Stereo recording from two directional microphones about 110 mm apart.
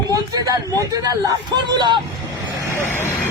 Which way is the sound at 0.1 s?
35° right (ahead or behind).